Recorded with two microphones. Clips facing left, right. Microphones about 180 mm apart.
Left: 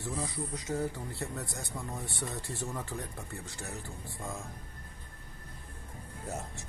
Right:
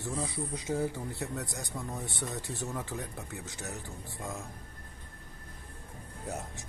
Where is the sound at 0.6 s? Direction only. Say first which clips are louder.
Right 2 dB; 10° right (ahead or behind).